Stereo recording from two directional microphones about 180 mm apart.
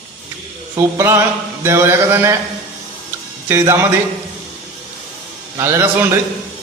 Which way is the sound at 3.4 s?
15° right (ahead or behind).